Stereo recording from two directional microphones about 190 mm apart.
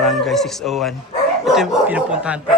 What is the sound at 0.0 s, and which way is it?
Speech, centre (ahead or behind).